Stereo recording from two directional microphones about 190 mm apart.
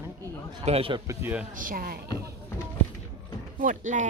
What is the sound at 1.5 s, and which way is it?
Speech, 45° right (ahead or behind).